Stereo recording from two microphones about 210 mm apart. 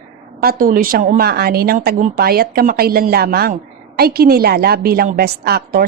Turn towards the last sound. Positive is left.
turn(degrees=-45)  # may be behind; listen again after turning